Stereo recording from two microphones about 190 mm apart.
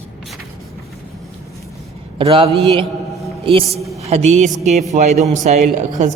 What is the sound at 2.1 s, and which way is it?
Speech, 30° right (ahead or behind).